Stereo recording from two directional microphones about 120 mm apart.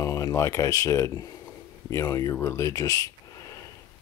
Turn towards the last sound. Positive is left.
turn(degrees=30)  # may be behind; listen again after turning